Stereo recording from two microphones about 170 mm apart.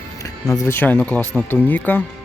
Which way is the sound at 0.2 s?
20° left (ahead or behind).